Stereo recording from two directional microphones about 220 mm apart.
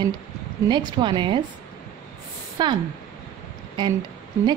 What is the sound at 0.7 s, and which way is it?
Speech, 20° right (ahead or behind).